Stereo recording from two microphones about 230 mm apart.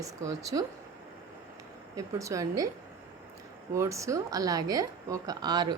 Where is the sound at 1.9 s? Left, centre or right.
Centre.